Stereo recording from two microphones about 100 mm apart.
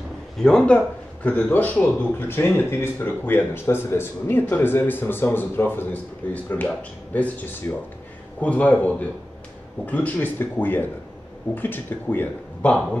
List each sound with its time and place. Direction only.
0.4 s a man's voice: 5° left (ahead or behind)
8.4 s a man's voice: 15° left (ahead or behind)